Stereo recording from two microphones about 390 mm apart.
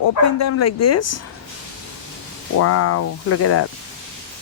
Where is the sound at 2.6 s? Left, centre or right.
Left.